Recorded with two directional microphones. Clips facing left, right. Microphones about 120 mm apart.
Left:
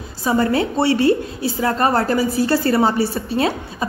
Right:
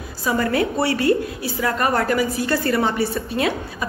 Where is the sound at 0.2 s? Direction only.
30° left (ahead or behind).